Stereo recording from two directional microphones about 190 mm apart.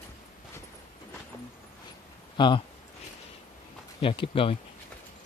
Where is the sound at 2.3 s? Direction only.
25° left (ahead or behind).